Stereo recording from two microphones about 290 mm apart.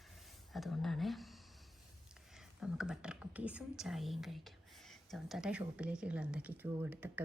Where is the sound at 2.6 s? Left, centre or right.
Centre.